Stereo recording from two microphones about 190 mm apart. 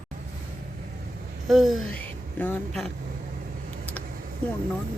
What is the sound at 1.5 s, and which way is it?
Speech, centre (ahead or behind).